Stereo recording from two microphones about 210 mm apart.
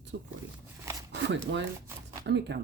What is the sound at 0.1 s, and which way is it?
Speech, 55° right (ahead or behind).